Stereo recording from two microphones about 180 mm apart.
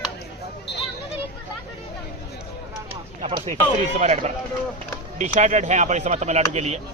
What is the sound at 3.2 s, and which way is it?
Speech, 35° right (ahead or behind).